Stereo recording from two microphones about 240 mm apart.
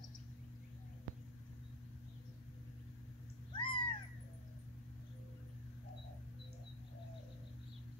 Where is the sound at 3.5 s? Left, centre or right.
Centre.